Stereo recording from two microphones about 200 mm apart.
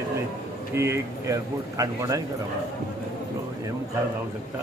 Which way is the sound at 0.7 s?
15° right (ahead or behind).